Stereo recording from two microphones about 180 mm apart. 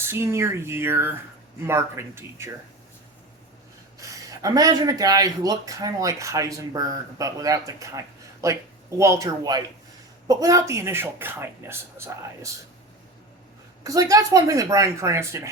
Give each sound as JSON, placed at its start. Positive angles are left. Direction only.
{"t": 0.0, "sound": "speech", "side_deg": -15}
{"t": 4.0, "sound": "speech", "side_deg": -20}
{"t": 13.8, "sound": "speech", "side_deg": -20}